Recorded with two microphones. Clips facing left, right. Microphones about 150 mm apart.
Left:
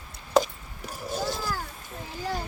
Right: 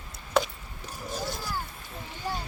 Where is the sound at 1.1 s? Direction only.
30° left (ahead or behind).